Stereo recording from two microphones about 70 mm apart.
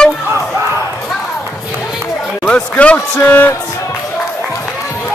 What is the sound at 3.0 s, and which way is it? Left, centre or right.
Speech, left.